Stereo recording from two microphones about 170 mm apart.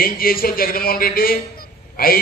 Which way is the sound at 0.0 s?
60° left (ahead or behind).